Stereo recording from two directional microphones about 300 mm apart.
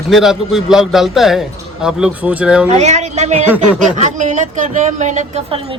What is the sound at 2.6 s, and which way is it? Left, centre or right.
Speech, right.